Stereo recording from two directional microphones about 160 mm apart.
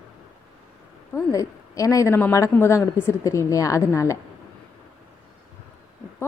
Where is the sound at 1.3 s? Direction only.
20° left (ahead or behind).